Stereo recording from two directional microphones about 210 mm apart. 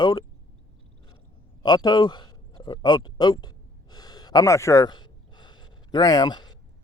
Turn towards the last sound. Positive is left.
turn(degrees=20)  # may be behind; listen again after turning